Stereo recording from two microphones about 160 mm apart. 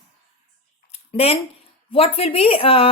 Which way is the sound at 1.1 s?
40° left (ahead or behind).